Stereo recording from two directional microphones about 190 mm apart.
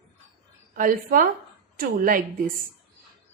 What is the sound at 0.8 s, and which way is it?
A woman's voice, 45° right (ahead or behind).